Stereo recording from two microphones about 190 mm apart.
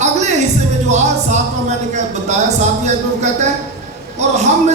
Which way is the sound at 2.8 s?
40° right (ahead or behind).